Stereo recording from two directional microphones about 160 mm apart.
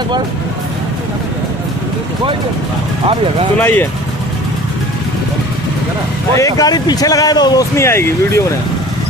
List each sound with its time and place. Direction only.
3.5 s speech: 10° left (ahead or behind)
6.3 s speech: 20° left (ahead or behind)